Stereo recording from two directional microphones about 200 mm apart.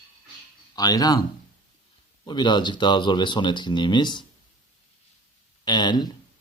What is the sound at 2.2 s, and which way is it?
Speech, 20° left (ahead or behind).